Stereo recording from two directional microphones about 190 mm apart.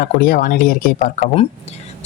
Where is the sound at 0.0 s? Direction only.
50° left (ahead or behind).